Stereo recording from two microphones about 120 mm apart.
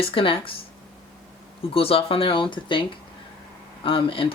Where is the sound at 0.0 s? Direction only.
50° left (ahead or behind).